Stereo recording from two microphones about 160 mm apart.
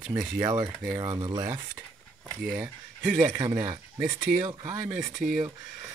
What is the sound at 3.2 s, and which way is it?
Speech, 25° right (ahead or behind).